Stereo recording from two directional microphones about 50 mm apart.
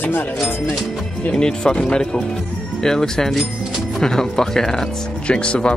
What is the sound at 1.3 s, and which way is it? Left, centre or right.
Speech, centre.